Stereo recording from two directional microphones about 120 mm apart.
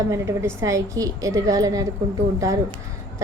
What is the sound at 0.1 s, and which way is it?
A woman's voice, 25° right (ahead or behind).